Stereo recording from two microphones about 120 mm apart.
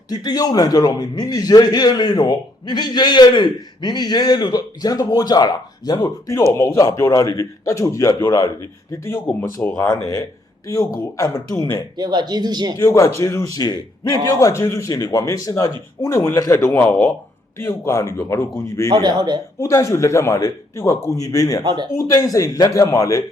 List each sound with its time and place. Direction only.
0.1 s a man's voice: 35° left (ahead or behind); by 9.9 s 15° left (ahead or behind)
9.9 s a man's voice: 30° left (ahead or behind)
11.9 s speech: 35° right (ahead or behind)
12.7 s a man's voice: 25° left (ahead or behind)
19.0 s speech: 35° right (ahead or behind)
19.5 s a man's voice: 25° left (ahead or behind)
21.6 s speech: 40° right (ahead or behind)
21.9 s a man's voice: 25° left (ahead or behind)